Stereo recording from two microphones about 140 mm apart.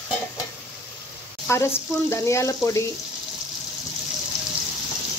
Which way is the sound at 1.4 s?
20° left (ahead or behind).